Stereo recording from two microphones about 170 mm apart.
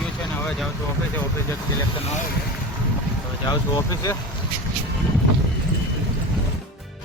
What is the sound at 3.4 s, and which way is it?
Speech, 20° left (ahead or behind).